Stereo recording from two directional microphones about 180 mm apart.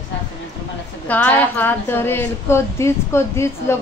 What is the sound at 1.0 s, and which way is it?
A woman's voice, 10° left (ahead or behind).